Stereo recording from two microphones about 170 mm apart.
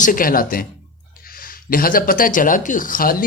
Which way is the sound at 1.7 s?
55° left (ahead or behind).